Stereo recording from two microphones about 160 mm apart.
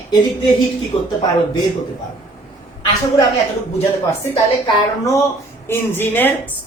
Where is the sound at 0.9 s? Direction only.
35° left (ahead or behind).